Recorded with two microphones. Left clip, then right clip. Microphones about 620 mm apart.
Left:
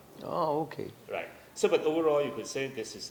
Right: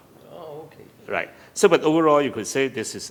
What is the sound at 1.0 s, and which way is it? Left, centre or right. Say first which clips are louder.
Speech: right 13 dB; right.